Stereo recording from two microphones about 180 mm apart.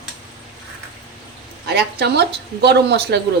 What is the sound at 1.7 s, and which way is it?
Speech, 65° right (ahead or behind).